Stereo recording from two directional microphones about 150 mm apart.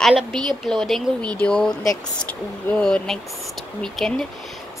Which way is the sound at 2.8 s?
5° left (ahead or behind).